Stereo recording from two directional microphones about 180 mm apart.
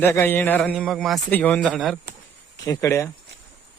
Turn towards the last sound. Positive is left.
turn(degrees=15)  # may be behind; listen again after turning